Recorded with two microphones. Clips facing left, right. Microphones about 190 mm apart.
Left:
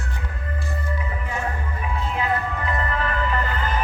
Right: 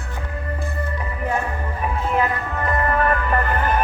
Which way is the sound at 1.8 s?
55° right (ahead or behind).